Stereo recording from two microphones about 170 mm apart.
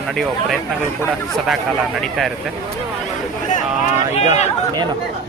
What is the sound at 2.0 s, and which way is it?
Speech, centre (ahead or behind).